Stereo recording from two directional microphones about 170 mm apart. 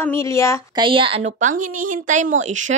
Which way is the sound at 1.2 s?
50° right (ahead or behind).